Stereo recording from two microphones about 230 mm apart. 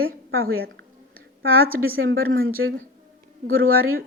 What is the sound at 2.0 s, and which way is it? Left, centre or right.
Speech, right.